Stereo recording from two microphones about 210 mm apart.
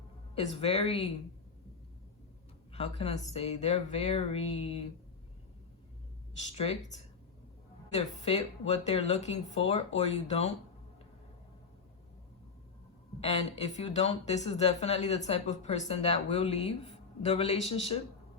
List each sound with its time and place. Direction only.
0.4 s speech: 30° left (ahead or behind)
2.7 s speech: 30° left (ahead or behind)
6.6 s speech: 30° left (ahead or behind)
7.9 s speech: 30° left (ahead or behind)
13.1 s speech: 30° left (ahead or behind)